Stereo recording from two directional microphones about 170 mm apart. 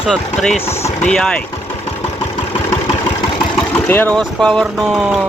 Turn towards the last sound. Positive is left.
turn(degrees=5)  # may be behind; listen again after turning